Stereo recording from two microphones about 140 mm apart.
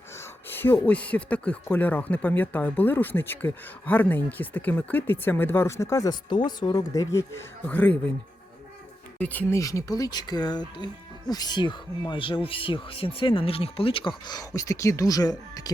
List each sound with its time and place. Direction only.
0.2 s speech: 15° left (ahead or behind)
7.7 s speech: 10° left (ahead or behind)
9.1 s speech: 10° left (ahead or behind)
9.6 s speech: 25° left (ahead or behind); by 14.1 s 40° left (ahead or behind)
14.3 s speech: 25° left (ahead or behind)